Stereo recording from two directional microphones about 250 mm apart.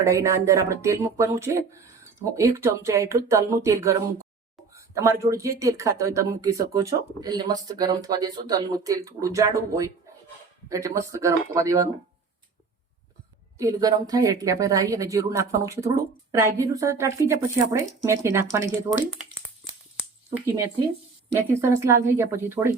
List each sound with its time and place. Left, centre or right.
0.0 s speech: centre
4.7 s a sound: centre
5.2 s speech: centre
13.6 s speech: centre
21.3 s speech: centre